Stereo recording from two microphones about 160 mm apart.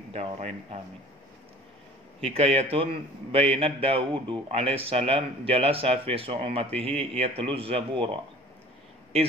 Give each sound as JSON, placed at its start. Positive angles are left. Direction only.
{"t": 0.1, "sound": "a man's voice", "side_deg": -40}
{"t": 2.2, "sound": "a man's voice", "side_deg": -40}